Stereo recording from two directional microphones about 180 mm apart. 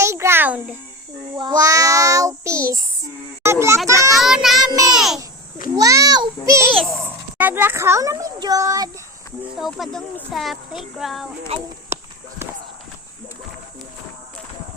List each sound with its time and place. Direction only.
0.0 s a sound: 15° right (ahead or behind)
1.4 s child singing: 20° right (ahead or behind)
3.4 s children playing: 15° right (ahead or behind)
3.8 s a child's voice: 15° right (ahead or behind)
4.1 s child singing: centre (ahead or behind)
4.7 s child singing: 20° right (ahead or behind)
4.9 s babbling: centre (ahead or behind)
5.7 s a sound: 20° right (ahead or behind)
7.3 s a child's voice: 10° right (ahead or behind)
9.6 s speech: centre (ahead or behind)
11.5 s speech: 35° right (ahead or behind)